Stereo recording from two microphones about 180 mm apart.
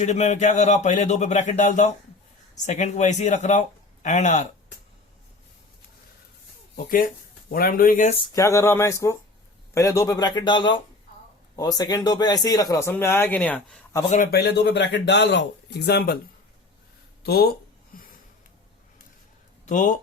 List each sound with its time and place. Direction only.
0.0 s speech: 40° left (ahead or behind)
6.7 s speech: 50° left (ahead or behind)
8.4 s speech: 15° left (ahead or behind)
14.3 s speech: 65° left (ahead or behind)
17.2 s speech: 60° left (ahead or behind)
17.9 s a sound: 55° left (ahead or behind)
19.6 s speech: 45° left (ahead or behind)